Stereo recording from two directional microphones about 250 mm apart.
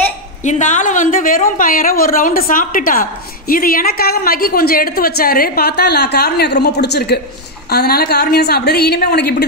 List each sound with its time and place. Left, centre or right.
0.4 s a woman's voice: left